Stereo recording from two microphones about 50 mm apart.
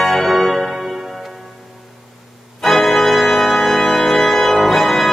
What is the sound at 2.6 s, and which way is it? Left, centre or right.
Organ, centre.